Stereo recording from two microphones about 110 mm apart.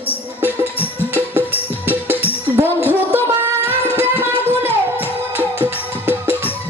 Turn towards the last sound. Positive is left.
turn(degrees=-20)  # may be behind; listen again after turning